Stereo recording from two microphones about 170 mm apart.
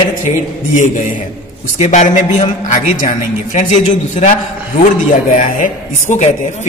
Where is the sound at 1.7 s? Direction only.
40° left (ahead or behind).